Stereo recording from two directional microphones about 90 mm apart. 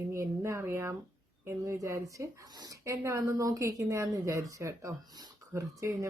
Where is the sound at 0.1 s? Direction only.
35° right (ahead or behind).